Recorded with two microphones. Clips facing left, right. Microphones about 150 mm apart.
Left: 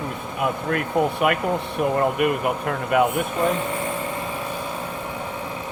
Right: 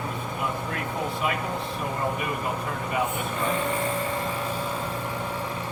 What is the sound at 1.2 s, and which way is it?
Speech, 65° left (ahead or behind).